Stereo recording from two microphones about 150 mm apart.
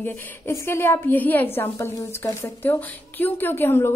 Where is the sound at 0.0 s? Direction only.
15° left (ahead or behind).